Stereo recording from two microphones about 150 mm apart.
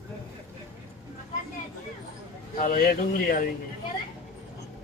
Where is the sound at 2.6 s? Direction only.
65° left (ahead or behind).